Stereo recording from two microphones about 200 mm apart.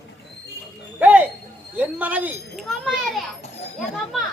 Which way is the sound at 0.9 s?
10° right (ahead or behind).